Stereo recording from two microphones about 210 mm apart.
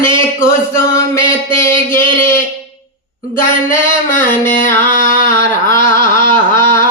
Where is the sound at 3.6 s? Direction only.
40° left (ahead or behind).